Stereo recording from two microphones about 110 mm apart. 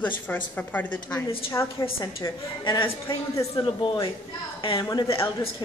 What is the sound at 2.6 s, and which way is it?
Speech, 45° left (ahead or behind).